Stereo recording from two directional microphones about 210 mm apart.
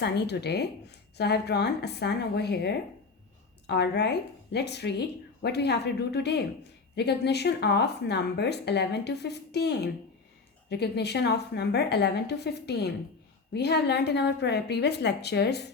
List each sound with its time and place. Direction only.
0.0 s speech: 50° left (ahead or behind)